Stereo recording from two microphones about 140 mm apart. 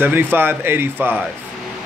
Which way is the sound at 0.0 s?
15° right (ahead or behind).